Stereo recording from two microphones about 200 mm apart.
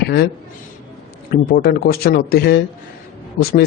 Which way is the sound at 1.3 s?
50° left (ahead or behind).